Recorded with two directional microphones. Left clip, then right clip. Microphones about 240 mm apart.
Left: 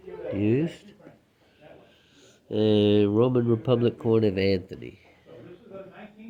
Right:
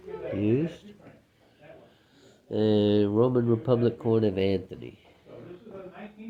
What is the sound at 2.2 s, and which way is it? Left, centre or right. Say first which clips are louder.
Speech: left 2 dB; left.